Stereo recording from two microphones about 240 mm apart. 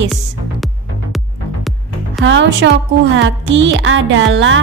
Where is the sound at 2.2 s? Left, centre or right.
Right.